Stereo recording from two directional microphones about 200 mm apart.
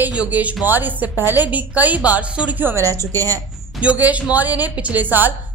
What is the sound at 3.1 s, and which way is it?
Speech, 10° left (ahead or behind).